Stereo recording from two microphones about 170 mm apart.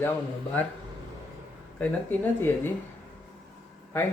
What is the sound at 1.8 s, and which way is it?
Speech, 10° left (ahead or behind).